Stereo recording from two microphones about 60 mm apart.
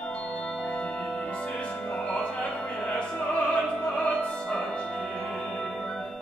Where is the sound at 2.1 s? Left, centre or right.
Centre.